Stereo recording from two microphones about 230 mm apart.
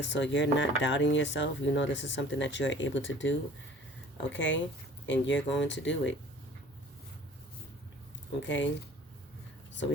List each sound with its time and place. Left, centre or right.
0.0 s speech: left
8.4 s speech: left